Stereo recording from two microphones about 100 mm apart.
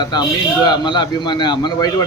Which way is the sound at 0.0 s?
45° left (ahead or behind).